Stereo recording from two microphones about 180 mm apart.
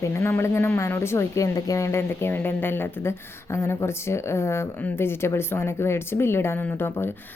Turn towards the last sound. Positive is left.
turn(degrees=10)  # may be behind; listen again after turning